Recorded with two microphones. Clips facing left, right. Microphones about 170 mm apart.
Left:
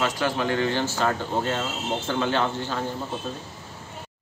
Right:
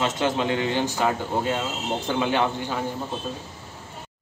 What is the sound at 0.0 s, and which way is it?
Speech, 25° right (ahead or behind).